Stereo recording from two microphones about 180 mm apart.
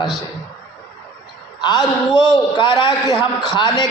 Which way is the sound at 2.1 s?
25° left (ahead or behind).